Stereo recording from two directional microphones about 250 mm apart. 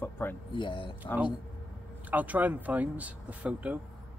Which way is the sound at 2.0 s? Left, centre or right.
Centre.